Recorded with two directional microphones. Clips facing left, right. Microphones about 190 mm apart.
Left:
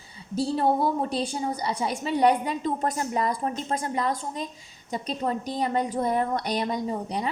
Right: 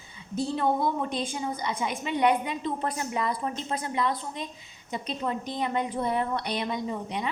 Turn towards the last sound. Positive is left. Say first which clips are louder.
# left 3 dB
turn(degrees=40)  # may be behind; listen again after turning